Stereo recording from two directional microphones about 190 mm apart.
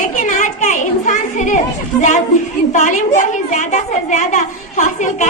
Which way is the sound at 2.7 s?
40° left (ahead or behind).